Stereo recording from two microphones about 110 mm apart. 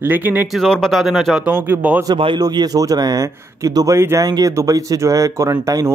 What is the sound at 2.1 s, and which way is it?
Speech, 55° right (ahead or behind).